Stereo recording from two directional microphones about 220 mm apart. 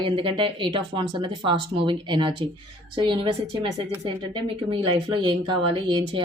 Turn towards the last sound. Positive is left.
turn(degrees=-25)  # may be behind; listen again after turning